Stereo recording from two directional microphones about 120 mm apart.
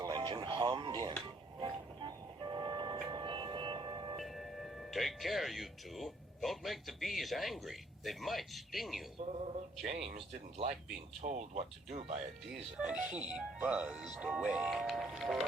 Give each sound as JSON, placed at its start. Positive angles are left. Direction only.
{"t": 0.0, "sound": "a sound", "side_deg": -40}
{"t": 1.6, "sound": "music", "side_deg": -40}
{"t": 4.2, "sound": "speech", "side_deg": 0}
{"t": 9.8, "sound": "speech", "side_deg": -60}
{"t": 11.2, "sound": "speech", "side_deg": -70}
{"t": 12.7, "sound": "speech", "side_deg": -5}